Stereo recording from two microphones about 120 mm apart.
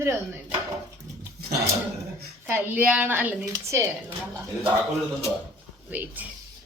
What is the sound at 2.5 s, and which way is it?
Speech, 15° right (ahead or behind).